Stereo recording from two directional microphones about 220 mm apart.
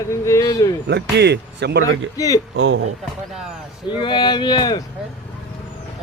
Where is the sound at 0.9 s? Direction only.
50° right (ahead or behind).